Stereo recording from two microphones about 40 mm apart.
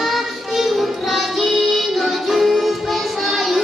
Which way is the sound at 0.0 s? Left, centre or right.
Centre.